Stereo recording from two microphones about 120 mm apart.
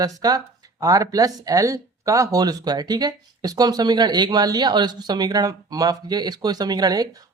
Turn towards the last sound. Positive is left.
turn(degrees=-35)  # may be behind; listen again after turning